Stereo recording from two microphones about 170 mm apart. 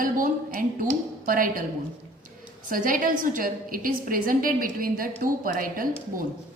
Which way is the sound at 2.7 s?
55° right (ahead or behind).